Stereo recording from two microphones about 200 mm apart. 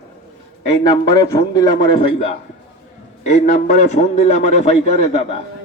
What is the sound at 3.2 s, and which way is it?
A man's voice, 35° left (ahead or behind).